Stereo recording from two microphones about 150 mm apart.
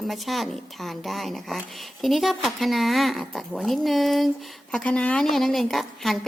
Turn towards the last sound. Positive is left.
turn(degrees=0)  # may be behind; listen again after turning